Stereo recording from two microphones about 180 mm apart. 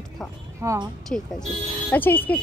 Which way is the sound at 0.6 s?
15° right (ahead or behind).